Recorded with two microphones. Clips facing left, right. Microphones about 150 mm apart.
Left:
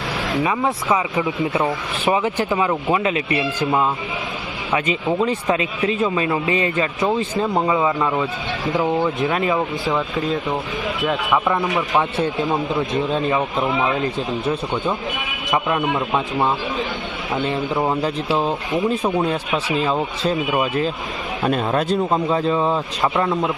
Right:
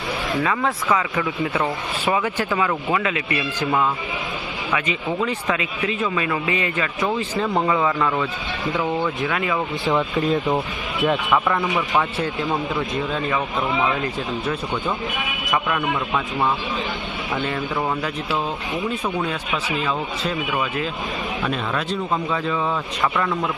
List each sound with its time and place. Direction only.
0.4 s speech: 20° left (ahead or behind)
9.8 s speech: centre (ahead or behind)
11.4 s speech: 20° left (ahead or behind)
15.4 s a man's voice: 25° left (ahead or behind)
17.3 s a man's voice: 20° left (ahead or behind)